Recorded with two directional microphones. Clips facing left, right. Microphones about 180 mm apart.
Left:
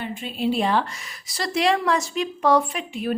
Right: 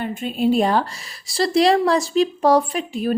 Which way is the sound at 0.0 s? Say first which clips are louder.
Right 5 dB; 45° right (ahead or behind).